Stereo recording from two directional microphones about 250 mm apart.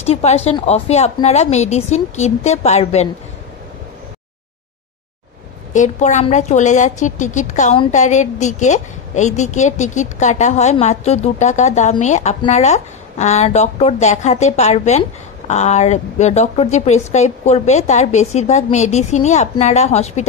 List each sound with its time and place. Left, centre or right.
0.0 s a woman's voice: left
5.7 s a woman's voice: left